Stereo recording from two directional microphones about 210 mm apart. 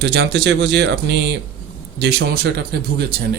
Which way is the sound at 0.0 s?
50° right (ahead or behind).